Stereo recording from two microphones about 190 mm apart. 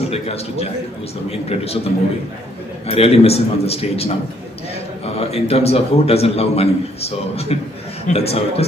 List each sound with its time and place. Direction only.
0.1 s a man's voice: 30° left (ahead or behind)
2.9 s a man's voice: 35° left (ahead or behind)
5.2 s a man's voice: 30° left (ahead or behind)